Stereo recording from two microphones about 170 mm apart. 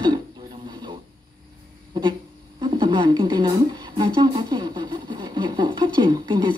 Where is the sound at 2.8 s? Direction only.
30° right (ahead or behind).